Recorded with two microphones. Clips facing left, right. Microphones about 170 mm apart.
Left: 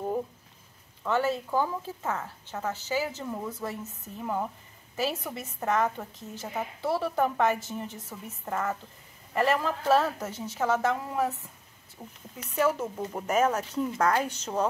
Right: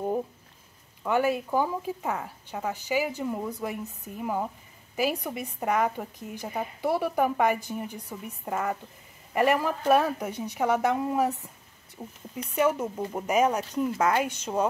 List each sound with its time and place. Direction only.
1.0 s speech: 15° right (ahead or behind)